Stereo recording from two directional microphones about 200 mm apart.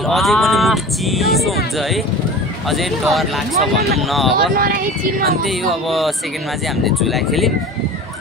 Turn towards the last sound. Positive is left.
turn(degrees=0)  # may be behind; listen again after turning